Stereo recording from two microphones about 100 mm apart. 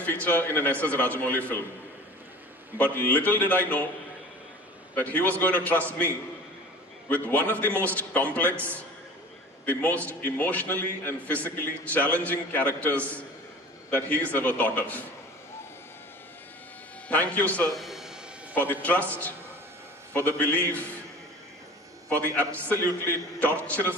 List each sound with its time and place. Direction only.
0.0 s a man's voice: 15° left (ahead or behind)
2.8 s a man's voice: 15° left (ahead or behind)
4.9 s a man's voice: 15° left (ahead or behind)
7.2 s a man's voice: 20° left (ahead or behind)
9.7 s a man's voice: 15° left (ahead or behind)
17.1 s a man's voice: 15° left (ahead or behind)
17.7 s a sound: centre (ahead or behind)
18.5 s a man's voice: 15° left (ahead or behind)
22.2 s a man's voice: 15° left (ahead or behind)